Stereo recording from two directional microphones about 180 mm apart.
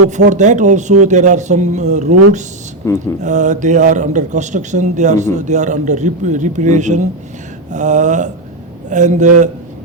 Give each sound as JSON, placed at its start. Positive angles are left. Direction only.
{"t": 0.3, "sound": "speech", "side_deg": -40}
{"t": 2.8, "sound": "speech", "side_deg": 15}
{"t": 3.2, "sound": "speech", "side_deg": -40}